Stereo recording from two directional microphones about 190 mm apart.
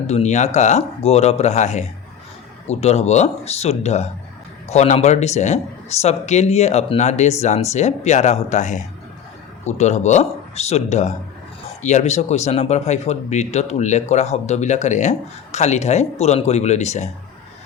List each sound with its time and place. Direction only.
0.1 s speech: 35° left (ahead or behind)